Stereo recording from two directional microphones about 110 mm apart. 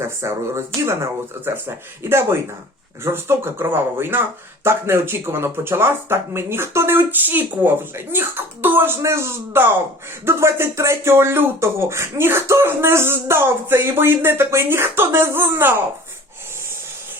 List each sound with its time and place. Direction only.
0.2 s speech: 25° right (ahead or behind)